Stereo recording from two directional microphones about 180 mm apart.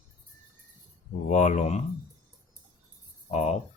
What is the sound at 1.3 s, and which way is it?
Speech, 40° left (ahead or behind).